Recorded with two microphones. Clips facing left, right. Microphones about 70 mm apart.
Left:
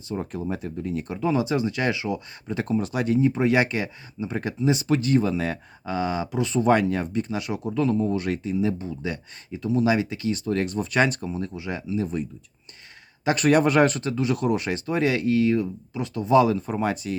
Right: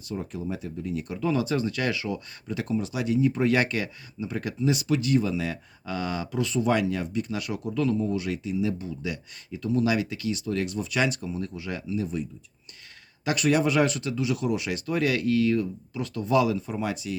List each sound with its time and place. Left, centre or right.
0.2 s speech: left
1.1 s speech: left
2.6 s speech: left
5.8 s speech: left
6.6 s speech: left
7.9 s speech: left
10.3 s speech: left
13.3 s speech: left